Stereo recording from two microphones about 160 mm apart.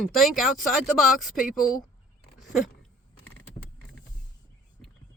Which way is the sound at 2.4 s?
Centre (ahead or behind).